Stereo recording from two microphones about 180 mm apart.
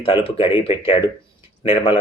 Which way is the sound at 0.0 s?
30° left (ahead or behind).